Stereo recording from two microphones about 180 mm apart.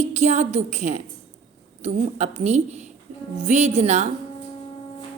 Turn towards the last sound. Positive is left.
turn(degrees=-40)  # may be behind; listen again after turning